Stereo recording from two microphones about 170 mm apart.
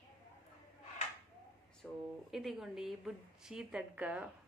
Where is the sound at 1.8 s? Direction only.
5° left (ahead or behind).